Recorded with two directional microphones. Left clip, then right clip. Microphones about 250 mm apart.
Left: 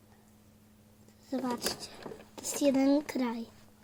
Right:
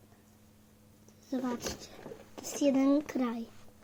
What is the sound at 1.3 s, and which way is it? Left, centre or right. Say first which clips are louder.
A child's voice: left 2 dB; centre.